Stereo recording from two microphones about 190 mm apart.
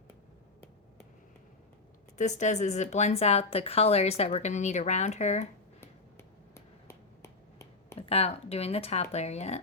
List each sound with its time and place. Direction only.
2.1 s speech: 40° left (ahead or behind)
5.8 s finger snapping: 15° left (ahead or behind)
7.9 s speech: 30° left (ahead or behind)